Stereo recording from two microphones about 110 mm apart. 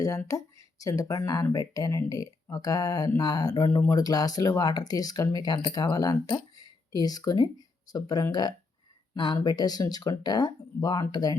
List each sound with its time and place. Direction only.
0.3 s speech: 30° left (ahead or behind)